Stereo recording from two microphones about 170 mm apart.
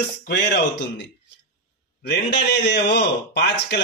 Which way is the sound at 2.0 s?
80° left.